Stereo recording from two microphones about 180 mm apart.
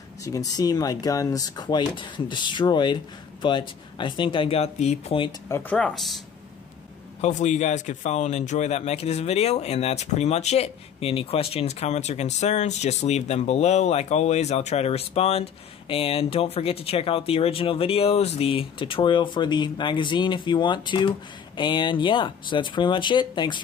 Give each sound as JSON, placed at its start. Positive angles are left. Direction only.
{"t": 0.2, "sound": "speech", "side_deg": 20}
{"t": 5.5, "sound": "speech", "side_deg": 10}
{"t": 7.2, "sound": "speech", "side_deg": 40}